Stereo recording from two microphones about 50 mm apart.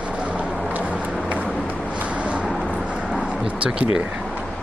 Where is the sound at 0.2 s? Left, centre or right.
Right.